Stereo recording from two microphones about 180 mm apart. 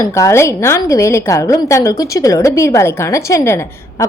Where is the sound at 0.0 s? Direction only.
15° left (ahead or behind).